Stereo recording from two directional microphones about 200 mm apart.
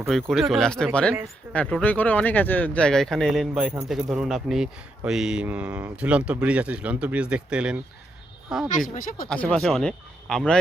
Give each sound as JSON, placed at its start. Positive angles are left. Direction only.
{"t": 0.0, "sound": "speech", "side_deg": 0}
{"t": 9.0, "sound": "speech", "side_deg": 45}
{"t": 9.3, "sound": "speech", "side_deg": 5}